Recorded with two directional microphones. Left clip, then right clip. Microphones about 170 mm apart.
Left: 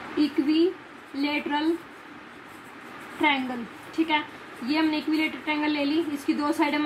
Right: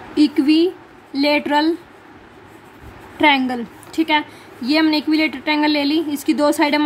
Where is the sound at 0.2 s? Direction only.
75° right (ahead or behind).